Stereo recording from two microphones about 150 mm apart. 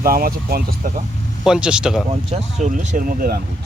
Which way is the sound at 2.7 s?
65° right (ahead or behind).